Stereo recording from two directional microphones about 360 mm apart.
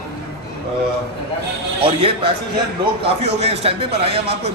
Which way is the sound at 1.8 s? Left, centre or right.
Centre.